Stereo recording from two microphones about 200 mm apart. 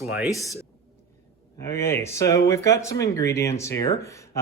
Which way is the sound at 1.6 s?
15° left (ahead or behind).